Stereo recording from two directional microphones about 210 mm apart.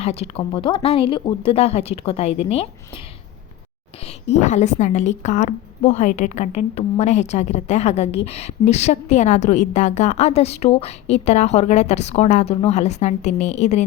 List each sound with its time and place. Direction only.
0.0 s speech: 30° left (ahead or behind)
4.0 s a woman's voice: 35° left (ahead or behind)